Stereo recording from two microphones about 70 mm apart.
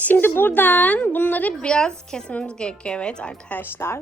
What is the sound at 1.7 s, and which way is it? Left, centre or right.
A woman's voice, centre.